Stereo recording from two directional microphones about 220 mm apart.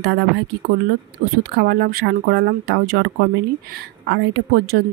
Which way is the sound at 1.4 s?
45° right (ahead or behind).